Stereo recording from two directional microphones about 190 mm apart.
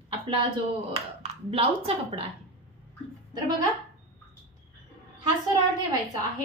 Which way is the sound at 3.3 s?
20° right (ahead or behind).